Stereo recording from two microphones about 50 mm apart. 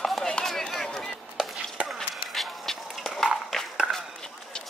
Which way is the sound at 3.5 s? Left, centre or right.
Centre.